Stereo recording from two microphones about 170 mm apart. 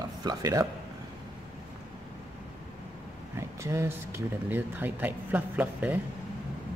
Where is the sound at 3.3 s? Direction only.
15° right (ahead or behind).